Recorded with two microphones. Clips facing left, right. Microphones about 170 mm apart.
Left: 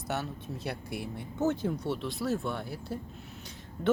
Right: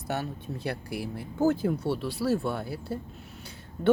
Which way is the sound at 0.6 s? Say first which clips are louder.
Right 4 dB; centre (ahead or behind).